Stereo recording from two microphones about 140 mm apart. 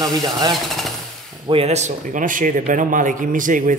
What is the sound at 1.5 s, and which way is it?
A man's voice, 45° right (ahead or behind).